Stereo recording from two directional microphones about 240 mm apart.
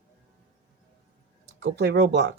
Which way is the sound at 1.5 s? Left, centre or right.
Right.